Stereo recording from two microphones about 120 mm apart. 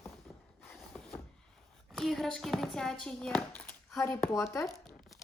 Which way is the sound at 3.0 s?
5° left (ahead or behind).